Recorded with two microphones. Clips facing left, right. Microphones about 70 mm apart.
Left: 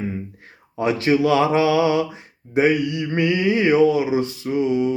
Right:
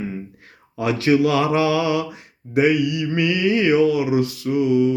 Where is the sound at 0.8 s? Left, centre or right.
Left.